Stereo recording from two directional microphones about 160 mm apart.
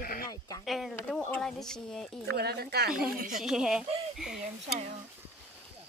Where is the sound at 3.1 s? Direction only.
60° right (ahead or behind).